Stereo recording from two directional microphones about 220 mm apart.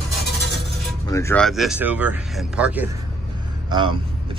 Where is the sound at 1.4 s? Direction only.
Centre (ahead or behind).